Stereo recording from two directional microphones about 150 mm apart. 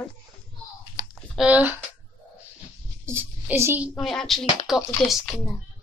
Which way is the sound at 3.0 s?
15° right (ahead or behind).